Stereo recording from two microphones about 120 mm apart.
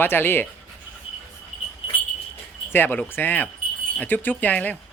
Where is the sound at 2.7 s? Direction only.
15° left (ahead or behind).